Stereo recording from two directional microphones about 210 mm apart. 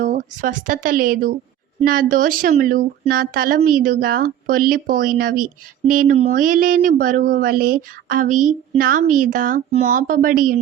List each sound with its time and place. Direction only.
0.0 s a woman's voice: 35° right (ahead or behind)